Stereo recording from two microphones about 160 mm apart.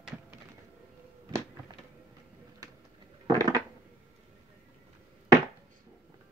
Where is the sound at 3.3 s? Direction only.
25° right (ahead or behind).